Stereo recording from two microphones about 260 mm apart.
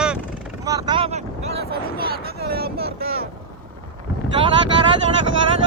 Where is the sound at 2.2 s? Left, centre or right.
Right.